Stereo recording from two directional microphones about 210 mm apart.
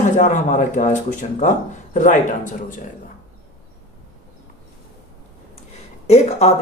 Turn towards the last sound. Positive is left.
turn(degrees=30)  # may be behind; listen again after turning